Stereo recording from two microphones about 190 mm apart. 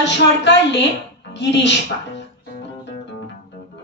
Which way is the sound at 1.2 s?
65° left (ahead or behind).